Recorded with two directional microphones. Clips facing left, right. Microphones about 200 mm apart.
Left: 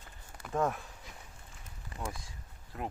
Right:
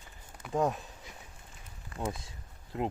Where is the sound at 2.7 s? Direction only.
20° right (ahead or behind).